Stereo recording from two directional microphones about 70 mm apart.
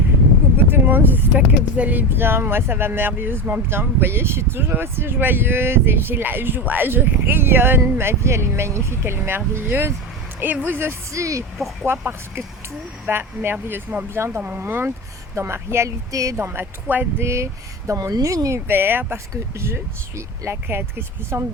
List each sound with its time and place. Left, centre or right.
0.5 s vehicle: right
1.3 s speech: centre
11.1 s speech: right
11.5 s speech: centre
11.9 s speech: right
17.2 s speech: right
18.7 s speech: right